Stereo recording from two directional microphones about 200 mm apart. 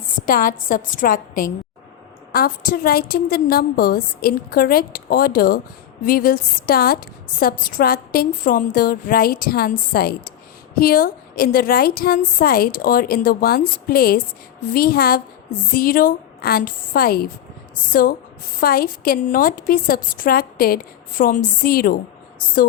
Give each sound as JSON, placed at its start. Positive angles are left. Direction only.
{"t": 0.3, "sound": "a woman's voice", "side_deg": 45}